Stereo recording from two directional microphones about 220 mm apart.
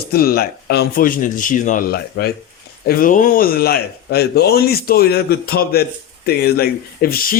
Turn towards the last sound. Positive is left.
turn(degrees=40)  # may be behind; listen again after turning